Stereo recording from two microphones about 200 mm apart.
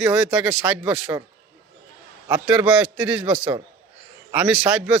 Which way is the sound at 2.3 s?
5° right (ahead or behind).